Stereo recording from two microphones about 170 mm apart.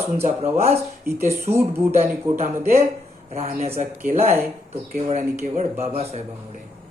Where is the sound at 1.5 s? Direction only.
15° right (ahead or behind).